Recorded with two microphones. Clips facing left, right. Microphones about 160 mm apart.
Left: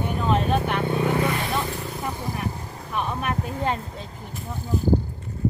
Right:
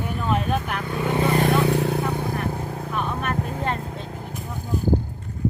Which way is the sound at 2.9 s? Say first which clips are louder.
Left 1 dB; 5° left (ahead or behind).